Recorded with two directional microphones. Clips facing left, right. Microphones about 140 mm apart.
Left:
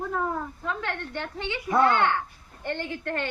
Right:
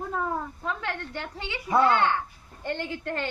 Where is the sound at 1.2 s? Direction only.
15° right (ahead or behind).